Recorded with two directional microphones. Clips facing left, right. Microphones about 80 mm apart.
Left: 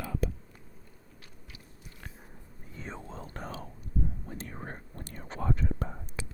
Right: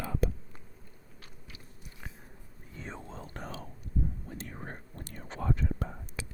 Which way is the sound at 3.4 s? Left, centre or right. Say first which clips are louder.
Left 2 dB; left.